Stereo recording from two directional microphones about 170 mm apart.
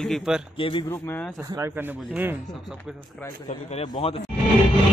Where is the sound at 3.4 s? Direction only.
40° left (ahead or behind).